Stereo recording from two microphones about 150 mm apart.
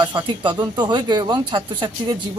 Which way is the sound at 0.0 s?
35° right (ahead or behind).